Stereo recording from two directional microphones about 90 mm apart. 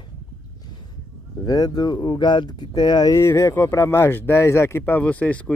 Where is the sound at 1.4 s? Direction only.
45° left (ahead or behind).